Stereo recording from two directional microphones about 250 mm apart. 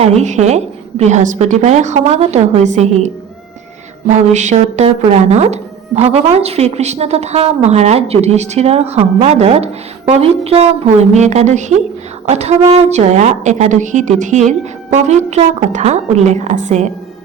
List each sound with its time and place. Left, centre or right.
0.0 s speech: right
4.1 s speech: right